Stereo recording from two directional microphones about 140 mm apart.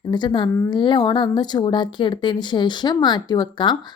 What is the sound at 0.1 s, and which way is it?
A woman's voice, 35° left (ahead or behind).